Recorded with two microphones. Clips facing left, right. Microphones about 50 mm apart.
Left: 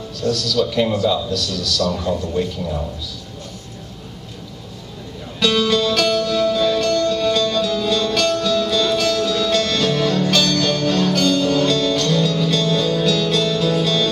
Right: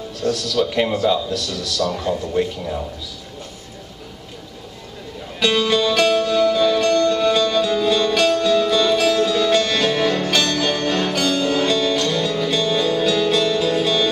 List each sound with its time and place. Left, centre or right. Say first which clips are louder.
0.2 s speech: left 1 dB; right
5.4 s music: even; centre